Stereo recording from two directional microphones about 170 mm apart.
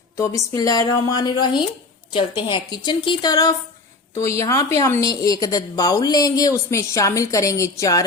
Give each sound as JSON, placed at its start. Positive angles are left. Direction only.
{"t": 0.2, "sound": "a woman's voice", "side_deg": 20}